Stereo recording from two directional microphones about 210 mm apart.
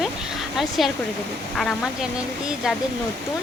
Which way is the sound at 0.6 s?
Centre (ahead or behind).